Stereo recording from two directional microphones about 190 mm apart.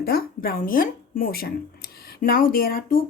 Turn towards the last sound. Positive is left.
turn(degrees=50)  # may be behind; listen again after turning